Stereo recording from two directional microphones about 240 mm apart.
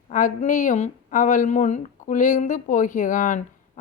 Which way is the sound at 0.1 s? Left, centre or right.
Left.